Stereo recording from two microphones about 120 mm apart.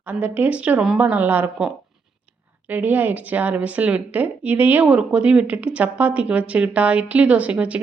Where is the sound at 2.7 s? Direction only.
15° right (ahead or behind).